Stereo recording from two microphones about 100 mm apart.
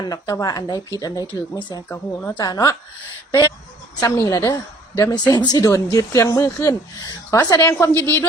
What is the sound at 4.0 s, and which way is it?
A woman's voice, 30° left (ahead or behind).